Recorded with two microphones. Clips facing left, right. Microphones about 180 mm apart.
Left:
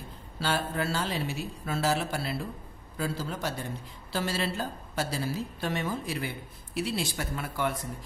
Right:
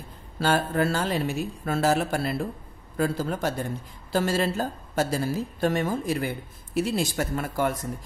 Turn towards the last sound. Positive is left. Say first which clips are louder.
# right 5 dB
turn(degrees=-45)  # may be behind; listen again after turning